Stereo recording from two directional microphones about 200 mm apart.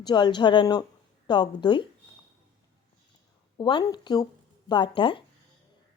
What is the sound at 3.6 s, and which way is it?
Speech, 25° left (ahead or behind).